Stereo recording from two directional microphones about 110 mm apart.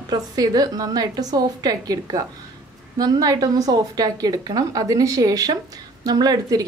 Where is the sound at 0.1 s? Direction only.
35° right (ahead or behind).